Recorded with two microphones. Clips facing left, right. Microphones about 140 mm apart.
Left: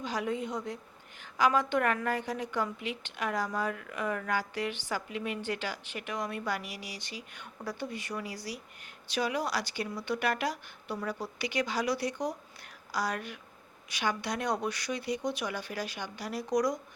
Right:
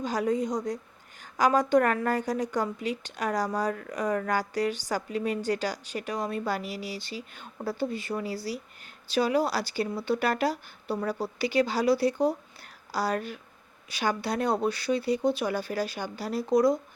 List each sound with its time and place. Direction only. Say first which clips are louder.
0.0 s a woman's voice: right 6 dB; 45° right (ahead or behind); by 16.8 s 30° right (ahead or behind)